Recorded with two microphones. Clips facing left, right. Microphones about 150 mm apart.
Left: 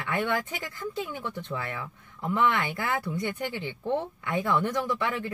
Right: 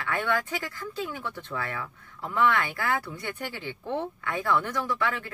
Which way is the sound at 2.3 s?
20° left (ahead or behind).